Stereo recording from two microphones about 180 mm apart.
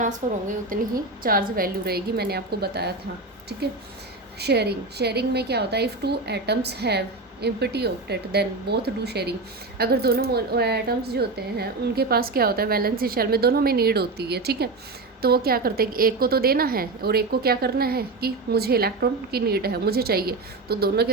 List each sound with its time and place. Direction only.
0.0 s a woman's voice: 45° right (ahead or behind); by 2.9 s 65° right (ahead or behind)
4.4 s a woman's voice: 65° right (ahead or behind)